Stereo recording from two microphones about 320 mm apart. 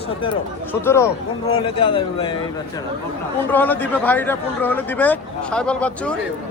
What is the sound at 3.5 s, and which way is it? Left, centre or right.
Speech, centre.